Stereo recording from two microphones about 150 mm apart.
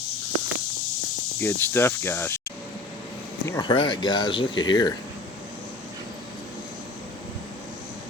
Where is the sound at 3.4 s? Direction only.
20° left (ahead or behind).